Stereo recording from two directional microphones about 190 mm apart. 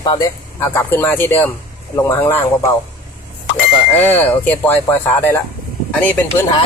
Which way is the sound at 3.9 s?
10° left (ahead or behind).